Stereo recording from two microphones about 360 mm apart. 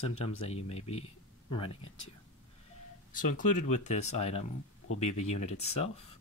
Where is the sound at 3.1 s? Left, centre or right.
Left.